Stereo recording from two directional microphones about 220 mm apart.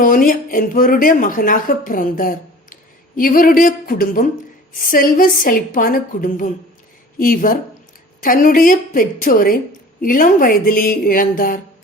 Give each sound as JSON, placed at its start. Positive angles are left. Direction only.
{"t": 0.0, "sound": "speech", "side_deg": 40}